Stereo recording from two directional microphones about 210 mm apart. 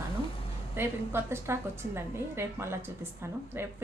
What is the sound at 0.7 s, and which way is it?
A woman's voice, 10° right (ahead or behind).